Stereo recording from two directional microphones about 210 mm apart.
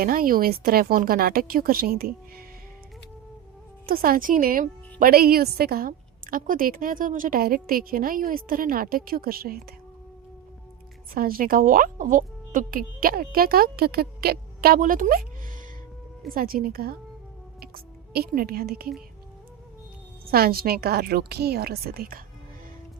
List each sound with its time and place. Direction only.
0.0 s a woman's voice: 45° right (ahead or behind)
3.8 s a woman's voice: 45° right (ahead or behind)
11.1 s a woman's voice: 45° right (ahead or behind)
20.3 s a woman's voice: 45° right (ahead or behind)